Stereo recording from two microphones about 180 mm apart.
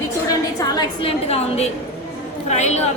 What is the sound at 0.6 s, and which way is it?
Speech, 20° left (ahead or behind).